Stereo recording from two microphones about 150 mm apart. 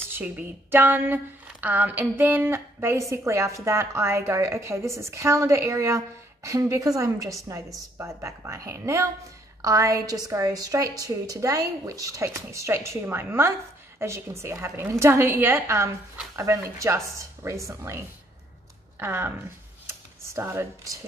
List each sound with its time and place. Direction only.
0.1 s a woman's voice: 10° right (ahead or behind)
19.9 s computer keyboard: 15° right (ahead or behind)